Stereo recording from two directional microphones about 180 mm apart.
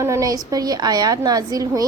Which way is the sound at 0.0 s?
15° right (ahead or behind).